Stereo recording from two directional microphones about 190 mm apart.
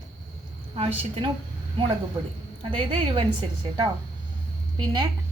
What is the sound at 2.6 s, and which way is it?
Speech, 25° right (ahead or behind).